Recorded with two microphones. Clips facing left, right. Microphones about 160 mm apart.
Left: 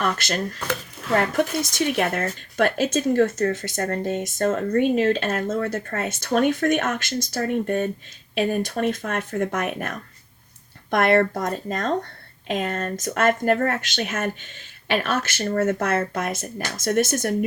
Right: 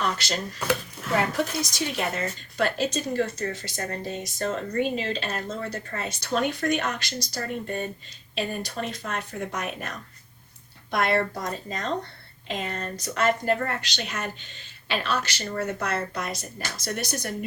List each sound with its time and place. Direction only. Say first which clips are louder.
0.0 s speech: left 3 dB; 50° left (ahead or behind)
1.7 s speech: left 6 dB; 60° left (ahead or behind)
10.9 s speech: left 6 dB; 55° left (ahead or behind)